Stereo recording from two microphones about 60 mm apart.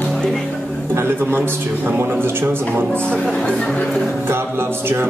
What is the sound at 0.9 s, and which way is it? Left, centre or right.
A man's voice, right.